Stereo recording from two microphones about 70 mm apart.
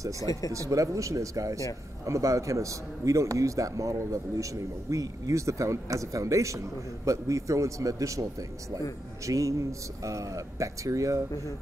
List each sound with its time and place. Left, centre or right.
0.5 s a man's voice: right